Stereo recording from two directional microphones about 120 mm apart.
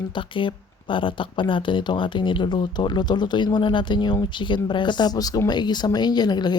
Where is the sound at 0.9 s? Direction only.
45° left (ahead or behind).